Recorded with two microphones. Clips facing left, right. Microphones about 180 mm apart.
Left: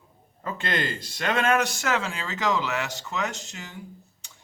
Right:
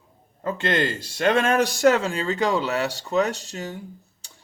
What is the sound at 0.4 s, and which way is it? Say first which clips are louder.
A man's voice: right 5 dB; 25° right (ahead or behind).